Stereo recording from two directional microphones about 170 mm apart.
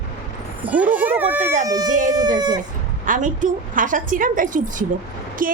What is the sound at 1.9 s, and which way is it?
Speech, 50° right (ahead or behind).